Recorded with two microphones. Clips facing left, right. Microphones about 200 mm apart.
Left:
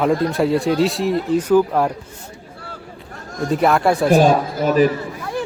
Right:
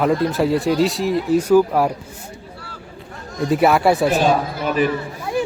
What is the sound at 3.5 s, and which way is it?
Speech, 5° right (ahead or behind).